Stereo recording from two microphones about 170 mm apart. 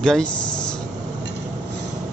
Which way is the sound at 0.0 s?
5° left (ahead or behind).